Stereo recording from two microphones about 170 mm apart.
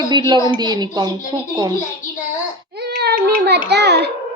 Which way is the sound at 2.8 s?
75° right (ahead or behind).